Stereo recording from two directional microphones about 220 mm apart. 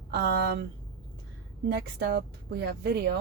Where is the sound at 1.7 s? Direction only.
50° right (ahead or behind).